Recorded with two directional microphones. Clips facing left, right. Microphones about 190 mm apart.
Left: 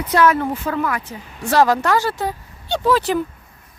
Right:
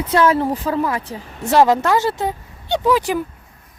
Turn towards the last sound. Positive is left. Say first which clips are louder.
# even
turn(degrees=-15)  # may be behind; listen again after turning